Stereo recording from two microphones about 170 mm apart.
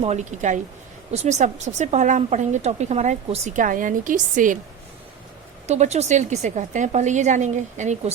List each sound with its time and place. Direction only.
0.0 s a woman's voice: 40° right (ahead or behind)
5.6 s a woman's voice: 40° right (ahead or behind)